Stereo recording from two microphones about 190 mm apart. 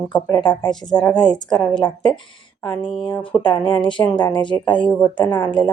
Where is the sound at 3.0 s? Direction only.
25° left (ahead or behind).